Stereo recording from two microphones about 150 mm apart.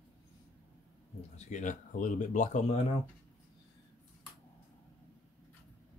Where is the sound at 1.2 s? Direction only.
50° left (ahead or behind).